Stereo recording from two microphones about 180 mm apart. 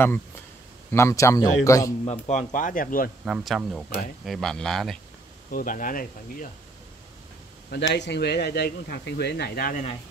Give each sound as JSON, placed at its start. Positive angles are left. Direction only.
{"t": 0.9, "sound": "a man's voice", "side_deg": 15}
{"t": 2.0, "sound": "speech", "side_deg": 40}
{"t": 3.3, "sound": "speech", "side_deg": 0}
{"t": 5.5, "sound": "speech", "side_deg": 50}
{"t": 7.7, "sound": "speech", "side_deg": 75}